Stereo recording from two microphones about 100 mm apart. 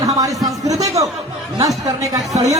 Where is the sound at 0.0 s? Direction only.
35° right (ahead or behind).